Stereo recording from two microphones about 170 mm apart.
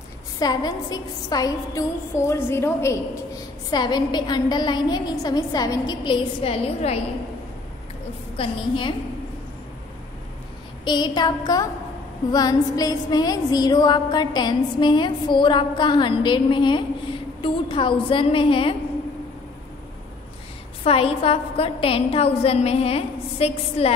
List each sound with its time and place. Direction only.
0.4 s music: 25° left (ahead or behind)
8.4 s music: 30° left (ahead or behind)
10.9 s music: 25° left (ahead or behind)
17.4 s a woman's voice: 30° left (ahead or behind)
20.8 s a woman's voice: 35° left (ahead or behind)